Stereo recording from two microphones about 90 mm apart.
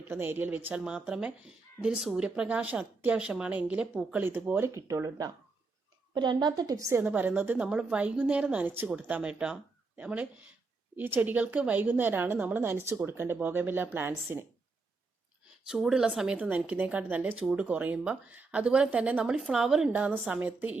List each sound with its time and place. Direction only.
0.1 s speech: 25° right (ahead or behind)
4.7 s speech: 35° right (ahead or behind)
6.1 s a woman's voice: 55° right (ahead or behind); by 7.0 s 35° right (ahead or behind)
7.0 s speech: 20° right (ahead or behind)
15.6 s speech: 5° right (ahead or behind)
19.9 s speech: 20° right (ahead or behind)